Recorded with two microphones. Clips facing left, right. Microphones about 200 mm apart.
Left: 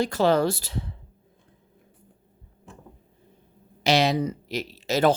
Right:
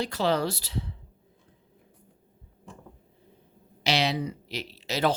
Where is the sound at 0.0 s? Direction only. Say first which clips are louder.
Left 5 dB; 50° left (ahead or behind).